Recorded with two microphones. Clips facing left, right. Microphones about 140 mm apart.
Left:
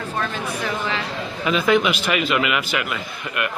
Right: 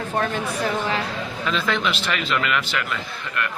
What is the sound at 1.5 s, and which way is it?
Speech, 10° left (ahead or behind).